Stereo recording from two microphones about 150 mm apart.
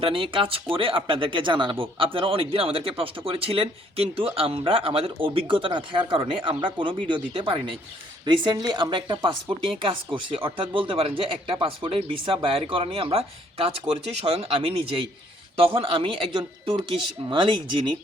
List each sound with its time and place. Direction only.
0.0 s speech: 35° right (ahead or behind)